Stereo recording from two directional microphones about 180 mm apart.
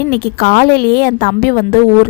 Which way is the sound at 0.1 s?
55° left (ahead or behind).